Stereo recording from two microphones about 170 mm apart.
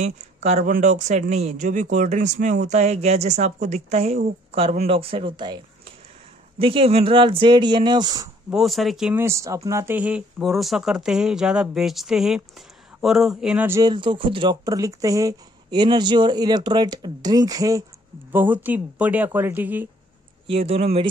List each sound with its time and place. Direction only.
0.0 s speech: 40° right (ahead or behind); by 8.3 s 25° right (ahead or behind)
8.5 s speech: centre (ahead or behind)
9.2 s speech: 15° right (ahead or behind)
13.7 s speech: 20° right (ahead or behind)
13.9 s speech: 30° right (ahead or behind); by 19.9 s 10° right (ahead or behind)
20.4 s speech: 35° right (ahead or behind)